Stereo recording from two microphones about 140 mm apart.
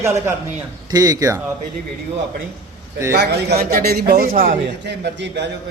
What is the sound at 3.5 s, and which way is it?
A man's voice, 90° right.